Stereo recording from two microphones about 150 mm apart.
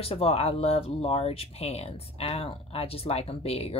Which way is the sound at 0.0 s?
40° left (ahead or behind).